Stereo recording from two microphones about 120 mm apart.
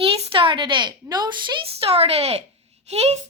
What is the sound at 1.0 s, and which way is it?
Speech, 35° right (ahead or behind).